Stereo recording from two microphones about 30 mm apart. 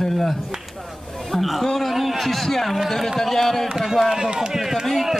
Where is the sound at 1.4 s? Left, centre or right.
Centre.